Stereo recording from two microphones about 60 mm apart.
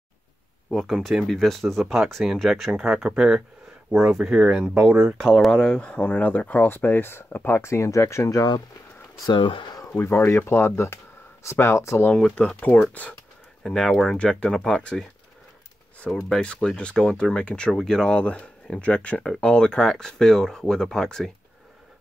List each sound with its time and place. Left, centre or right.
0.7 s speech: centre
2.7 s speech: centre
5.1 s speech: centre
5.5 s speech: centre; by 8.4 s left
9.8 s speech: left
12.5 s speech: left
13.6 s speech: centre
16.3 s speech: centre